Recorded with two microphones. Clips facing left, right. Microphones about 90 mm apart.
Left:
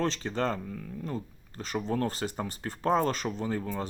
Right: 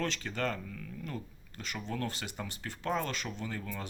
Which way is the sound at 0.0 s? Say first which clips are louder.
Left 5 dB; 35° left (ahead or behind).